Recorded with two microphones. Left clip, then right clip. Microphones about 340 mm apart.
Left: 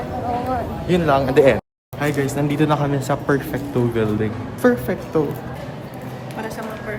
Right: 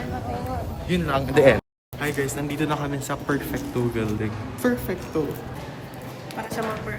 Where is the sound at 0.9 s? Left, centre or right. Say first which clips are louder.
Left 8 dB; centre.